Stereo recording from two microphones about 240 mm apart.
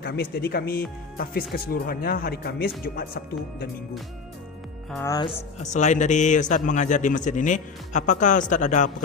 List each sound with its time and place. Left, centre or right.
0.0 s a man's voice: left
4.9 s speech: centre
5.6 s a man's voice: left